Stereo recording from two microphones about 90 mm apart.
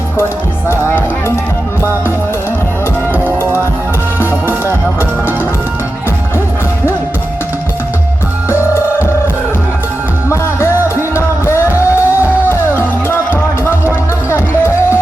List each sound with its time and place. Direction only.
8.4 s music: 30° left (ahead or behind)
10.2 s music: 30° left (ahead or behind)